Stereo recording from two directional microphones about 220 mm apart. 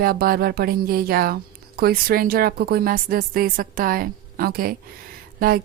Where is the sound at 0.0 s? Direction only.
40° right (ahead or behind).